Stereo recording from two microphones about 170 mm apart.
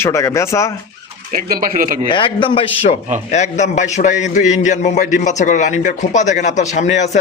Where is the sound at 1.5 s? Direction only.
55° right (ahead or behind).